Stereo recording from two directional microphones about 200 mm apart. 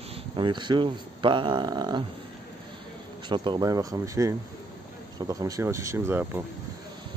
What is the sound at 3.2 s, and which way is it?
Speech, 25° right (ahead or behind).